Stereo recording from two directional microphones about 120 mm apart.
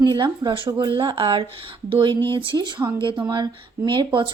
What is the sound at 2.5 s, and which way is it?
Speech, 35° right (ahead or behind).